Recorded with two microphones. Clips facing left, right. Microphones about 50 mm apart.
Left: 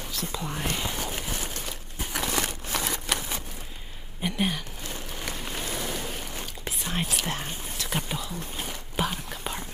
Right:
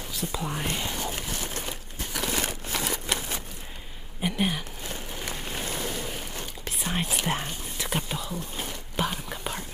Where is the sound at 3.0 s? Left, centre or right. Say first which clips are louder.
Even; centre.